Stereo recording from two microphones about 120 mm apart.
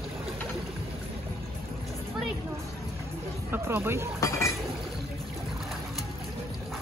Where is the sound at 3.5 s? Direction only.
20° right (ahead or behind).